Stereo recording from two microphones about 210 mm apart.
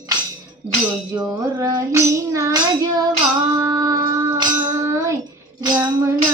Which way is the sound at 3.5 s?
15° right (ahead or behind).